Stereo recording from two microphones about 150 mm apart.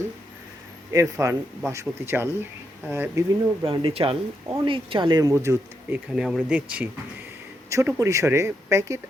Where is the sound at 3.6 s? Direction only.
40° right (ahead or behind).